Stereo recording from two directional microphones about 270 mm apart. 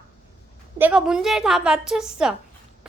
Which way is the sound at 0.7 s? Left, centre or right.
Centre.